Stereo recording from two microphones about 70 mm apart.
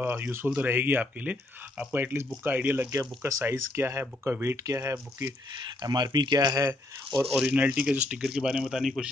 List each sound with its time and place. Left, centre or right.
0.0 s speech: right
2.9 s speech: right
3.4 s speech: right
5.8 s speech: right
7.2 s speech: centre
7.5 s speech: centre
8.3 s speech: centre